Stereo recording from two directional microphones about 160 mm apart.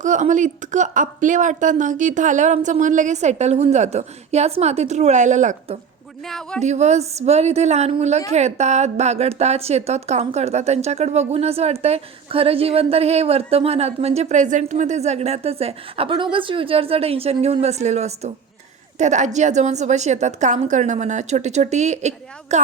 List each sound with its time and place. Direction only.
0.0 s speech: 50° right (ahead or behind)
6.2 s speech: centre (ahead or behind)
6.6 s a woman's voice: 45° right (ahead or behind)